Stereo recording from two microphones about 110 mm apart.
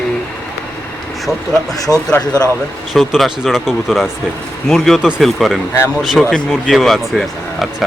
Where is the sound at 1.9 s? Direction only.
20° right (ahead or behind).